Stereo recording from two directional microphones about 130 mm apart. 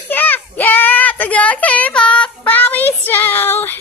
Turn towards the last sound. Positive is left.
turn(degrees=15)  # may be behind; listen again after turning